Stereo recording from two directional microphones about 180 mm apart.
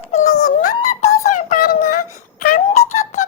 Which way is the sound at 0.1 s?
40° left (ahead or behind).